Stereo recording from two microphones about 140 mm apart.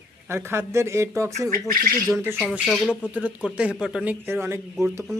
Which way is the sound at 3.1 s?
10° right (ahead or behind).